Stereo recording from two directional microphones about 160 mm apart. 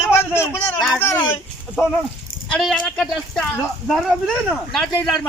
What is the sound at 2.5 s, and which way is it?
Speech, 5° left (ahead or behind).